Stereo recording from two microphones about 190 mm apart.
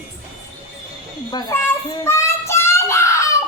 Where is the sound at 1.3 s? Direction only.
20° left (ahead or behind).